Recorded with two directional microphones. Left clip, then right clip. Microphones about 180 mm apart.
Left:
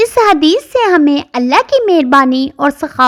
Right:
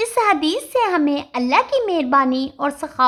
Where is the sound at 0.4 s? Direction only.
35° left (ahead or behind).